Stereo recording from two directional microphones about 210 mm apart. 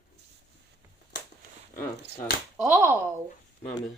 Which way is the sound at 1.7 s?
40° left (ahead or behind).